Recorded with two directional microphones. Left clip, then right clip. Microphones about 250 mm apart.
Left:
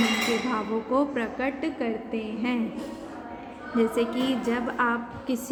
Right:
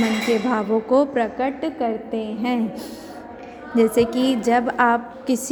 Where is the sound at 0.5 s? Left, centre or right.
Right.